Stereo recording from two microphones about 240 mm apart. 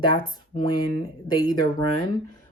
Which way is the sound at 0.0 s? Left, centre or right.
Centre.